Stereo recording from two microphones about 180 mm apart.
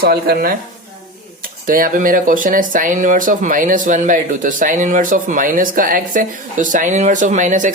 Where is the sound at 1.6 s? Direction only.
50° right (ahead or behind).